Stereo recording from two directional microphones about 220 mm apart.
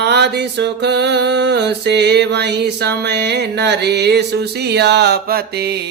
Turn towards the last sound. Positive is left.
turn(degrees=-45)  # may be behind; listen again after turning